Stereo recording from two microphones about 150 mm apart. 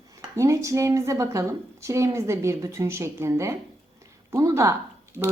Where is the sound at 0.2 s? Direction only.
20° right (ahead or behind).